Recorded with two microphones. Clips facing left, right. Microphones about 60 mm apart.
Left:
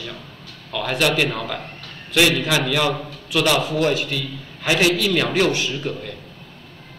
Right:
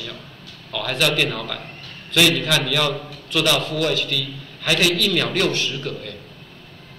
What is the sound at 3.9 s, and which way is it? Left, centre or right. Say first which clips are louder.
A man's voice: even; left.